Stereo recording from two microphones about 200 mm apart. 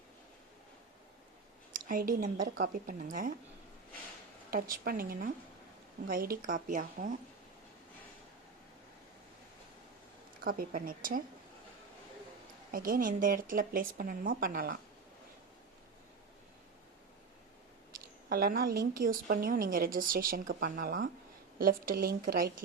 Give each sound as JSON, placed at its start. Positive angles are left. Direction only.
{"t": 1.9, "sound": "a woman's voice", "side_deg": -45}
{"t": 4.5, "sound": "a woman's voice", "side_deg": -45}
{"t": 10.4, "sound": "a woman's voice", "side_deg": -45}
{"t": 12.7, "sound": "a woman's voice", "side_deg": -45}
{"t": 18.3, "sound": "a woman's voice", "side_deg": -50}